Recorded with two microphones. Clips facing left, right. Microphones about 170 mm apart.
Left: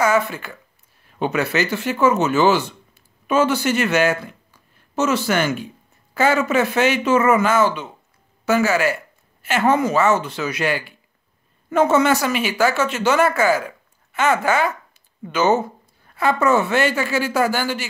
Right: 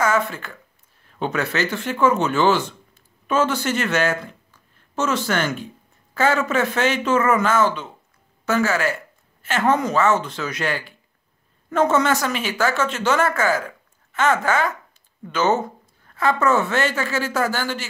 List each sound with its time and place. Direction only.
0.0 s speech: 10° left (ahead or behind)